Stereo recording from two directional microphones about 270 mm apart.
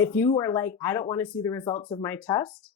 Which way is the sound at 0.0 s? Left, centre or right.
Centre.